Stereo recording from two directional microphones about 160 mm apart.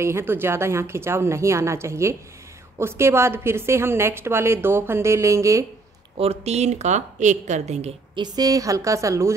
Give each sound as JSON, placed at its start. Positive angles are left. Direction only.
{"t": 0.0, "sound": "a woman's voice", "side_deg": -15}
{"t": 6.1, "sound": "a woman's voice", "side_deg": -40}
{"t": 8.2, "sound": "a woman's voice", "side_deg": -25}